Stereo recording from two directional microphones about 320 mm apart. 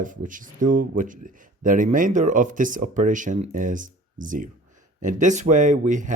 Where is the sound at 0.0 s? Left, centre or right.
Right.